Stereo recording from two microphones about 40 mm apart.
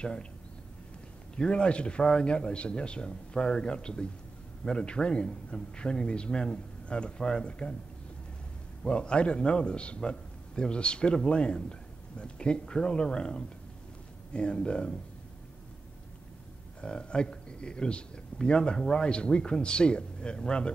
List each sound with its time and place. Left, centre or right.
0.0 s speech: left
1.3 s speech: left
8.8 s speech: left
16.8 s speech: left